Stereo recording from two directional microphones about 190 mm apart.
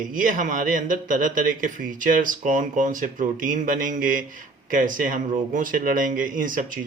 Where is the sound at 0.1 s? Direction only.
45° right (ahead or behind).